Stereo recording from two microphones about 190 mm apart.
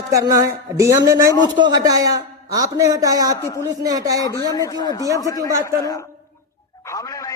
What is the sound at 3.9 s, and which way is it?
Speech, 20° right (ahead or behind).